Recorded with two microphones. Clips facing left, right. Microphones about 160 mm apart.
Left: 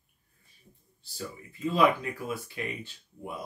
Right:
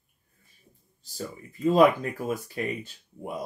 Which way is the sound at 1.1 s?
40° right (ahead or behind).